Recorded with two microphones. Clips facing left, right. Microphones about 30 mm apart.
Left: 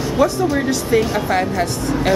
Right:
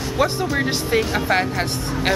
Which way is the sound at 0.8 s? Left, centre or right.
Right.